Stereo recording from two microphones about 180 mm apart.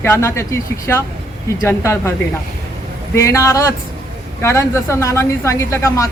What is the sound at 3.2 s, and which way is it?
A woman's voice, 15° left (ahead or behind).